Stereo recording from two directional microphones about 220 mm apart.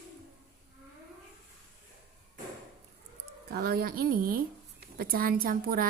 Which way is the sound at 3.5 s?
45° right (ahead or behind).